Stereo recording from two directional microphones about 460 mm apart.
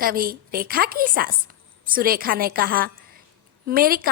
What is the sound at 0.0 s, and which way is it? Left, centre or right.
A woman's voice, centre.